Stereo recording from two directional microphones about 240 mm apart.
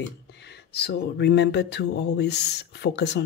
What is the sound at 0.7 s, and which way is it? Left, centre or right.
Speech, left.